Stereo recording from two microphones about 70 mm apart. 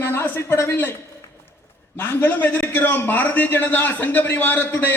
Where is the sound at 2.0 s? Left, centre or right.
Left.